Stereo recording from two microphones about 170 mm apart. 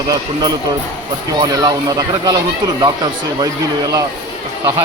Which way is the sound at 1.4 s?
20° right (ahead or behind).